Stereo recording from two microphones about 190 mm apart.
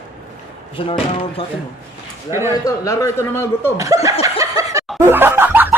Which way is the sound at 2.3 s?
15° right (ahead or behind).